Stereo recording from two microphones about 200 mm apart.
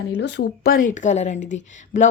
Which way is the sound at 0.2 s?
60° left (ahead or behind).